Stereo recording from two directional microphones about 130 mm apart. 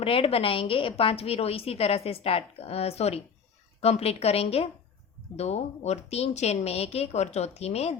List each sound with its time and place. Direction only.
0.0 s a woman's voice: 45° left (ahead or behind)